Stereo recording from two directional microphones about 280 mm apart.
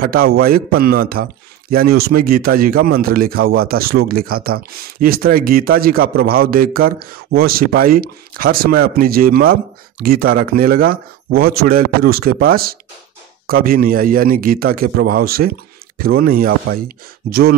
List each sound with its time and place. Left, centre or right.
0.0 s a man's voice: right